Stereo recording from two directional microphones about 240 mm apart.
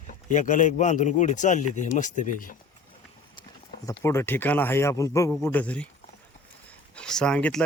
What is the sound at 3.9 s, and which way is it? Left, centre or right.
Speech, centre.